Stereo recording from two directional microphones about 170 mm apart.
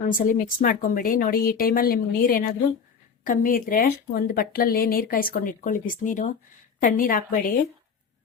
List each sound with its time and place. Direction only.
0.1 s speech: 55° left (ahead or behind)